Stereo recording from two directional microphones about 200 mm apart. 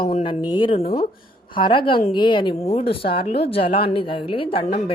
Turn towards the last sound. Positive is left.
turn(degrees=25)  # may be behind; listen again after turning